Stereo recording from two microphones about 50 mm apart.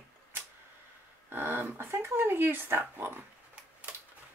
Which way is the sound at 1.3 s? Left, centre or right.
Right.